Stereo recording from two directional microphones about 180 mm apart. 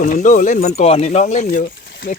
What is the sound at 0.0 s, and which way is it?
Speech, 45° left (ahead or behind).